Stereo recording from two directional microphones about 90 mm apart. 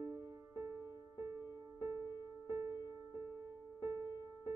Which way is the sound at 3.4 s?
40° right (ahead or behind).